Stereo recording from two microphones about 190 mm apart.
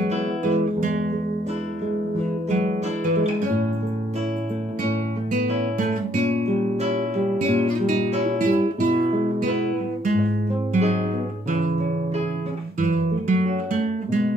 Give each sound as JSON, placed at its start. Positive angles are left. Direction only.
{"t": 0.0, "sound": "guitar", "side_deg": -35}
{"t": 2.5, "sound": "guitar", "side_deg": -40}
{"t": 5.3, "sound": "music", "side_deg": -45}
{"t": 6.5, "sound": "guitar", "side_deg": -35}
{"t": 10.0, "sound": "guitar", "side_deg": -45}
{"t": 12.8, "sound": "guitar", "side_deg": -40}